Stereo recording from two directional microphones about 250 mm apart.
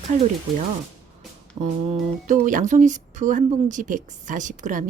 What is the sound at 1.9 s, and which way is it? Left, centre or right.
Speech, right.